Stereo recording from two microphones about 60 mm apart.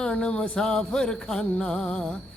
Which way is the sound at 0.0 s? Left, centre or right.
Centre.